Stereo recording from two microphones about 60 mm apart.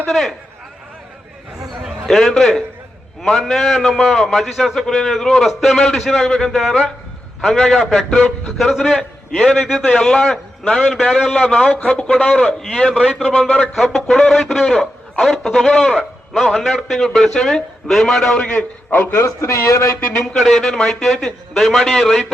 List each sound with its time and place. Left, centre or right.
0.1 s a man's voice: centre
1.8 s a man's voice: centre
11.9 s a man's voice: centre
12.8 s a man's voice: right
13.6 s a man's voice: centre
18.5 s a man's voice: left
19.2 s speech: left
20.3 s a man's voice: centre